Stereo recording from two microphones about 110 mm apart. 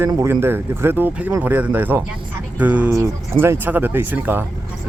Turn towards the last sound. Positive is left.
turn(degrees=-15)  # may be behind; listen again after turning